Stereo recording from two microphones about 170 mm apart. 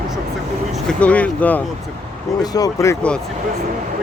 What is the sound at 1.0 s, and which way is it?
Speech, 10° left (ahead or behind).